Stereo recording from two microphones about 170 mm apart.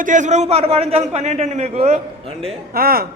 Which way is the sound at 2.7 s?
60° right (ahead or behind).